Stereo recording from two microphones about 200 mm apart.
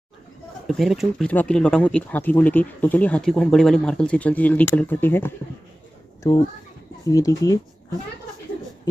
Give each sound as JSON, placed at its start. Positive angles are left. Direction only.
{"t": 0.7, "sound": "speech", "side_deg": 0}
{"t": 7.1, "sound": "speech", "side_deg": 15}